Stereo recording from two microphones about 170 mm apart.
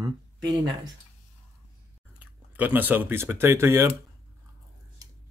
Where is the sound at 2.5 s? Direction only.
10° right (ahead or behind).